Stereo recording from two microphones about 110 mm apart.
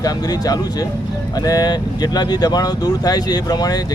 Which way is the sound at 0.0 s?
35° left (ahead or behind).